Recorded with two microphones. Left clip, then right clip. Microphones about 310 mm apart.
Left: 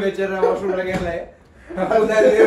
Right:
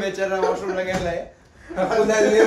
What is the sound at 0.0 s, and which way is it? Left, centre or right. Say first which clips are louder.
Speech: left 2 dB; right.